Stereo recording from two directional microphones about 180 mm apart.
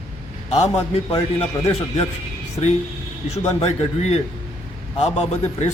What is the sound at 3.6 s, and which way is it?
A man's voice, 35° left (ahead or behind).